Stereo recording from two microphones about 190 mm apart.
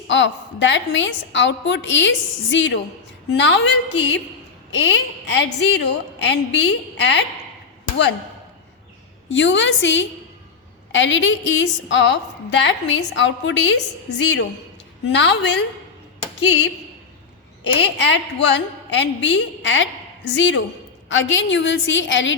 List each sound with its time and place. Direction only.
0.1 s a woman's voice: 75° left (ahead or behind)
9.3 s a woman's voice: 80° left
17.9 s a woman's voice: 70° left (ahead or behind)